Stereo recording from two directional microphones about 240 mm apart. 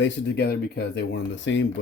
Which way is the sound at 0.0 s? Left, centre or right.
Left.